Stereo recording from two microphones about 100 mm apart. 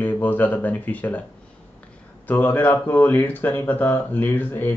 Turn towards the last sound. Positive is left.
turn(degrees=20)  # may be behind; listen again after turning